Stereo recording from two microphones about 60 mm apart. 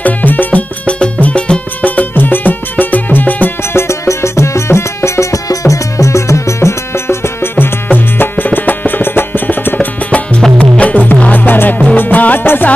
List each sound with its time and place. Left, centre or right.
0.0 s music: left
3.7 s music: left
7.5 s music: left